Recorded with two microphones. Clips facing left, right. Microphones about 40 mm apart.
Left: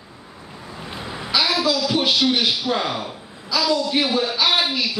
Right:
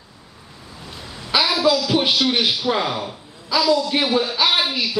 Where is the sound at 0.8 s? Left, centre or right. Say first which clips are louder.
Left 5 dB; left.